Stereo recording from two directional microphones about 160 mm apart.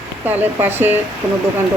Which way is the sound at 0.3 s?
15° right (ahead or behind).